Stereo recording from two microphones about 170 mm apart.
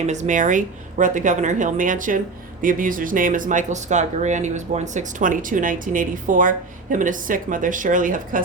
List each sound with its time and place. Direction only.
0.0 s speech: 45° right (ahead or behind)